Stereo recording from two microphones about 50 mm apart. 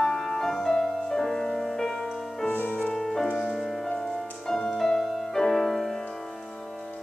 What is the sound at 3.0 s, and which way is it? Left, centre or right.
Music, centre.